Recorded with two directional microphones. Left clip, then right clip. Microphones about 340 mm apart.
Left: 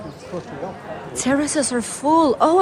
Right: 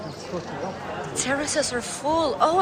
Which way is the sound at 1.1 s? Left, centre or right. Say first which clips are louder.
Left 5 dB; centre.